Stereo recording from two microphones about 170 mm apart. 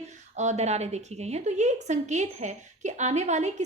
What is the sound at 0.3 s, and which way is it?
A woman's voice, 40° right (ahead or behind).